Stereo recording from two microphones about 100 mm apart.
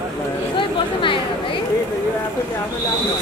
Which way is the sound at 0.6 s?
60° left (ahead or behind).